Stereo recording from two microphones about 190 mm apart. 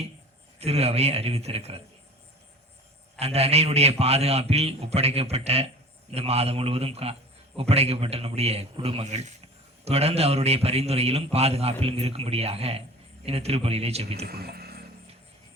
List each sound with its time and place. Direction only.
0.6 s a man's voice: 35° right (ahead or behind)
3.2 s a man's voice: 35° right (ahead or behind)
14.3 s speech: 55° right (ahead or behind)